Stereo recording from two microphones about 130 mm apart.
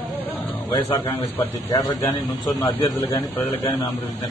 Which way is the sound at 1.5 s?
30° left (ahead or behind).